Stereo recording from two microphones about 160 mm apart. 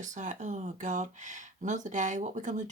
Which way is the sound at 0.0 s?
50° right (ahead or behind).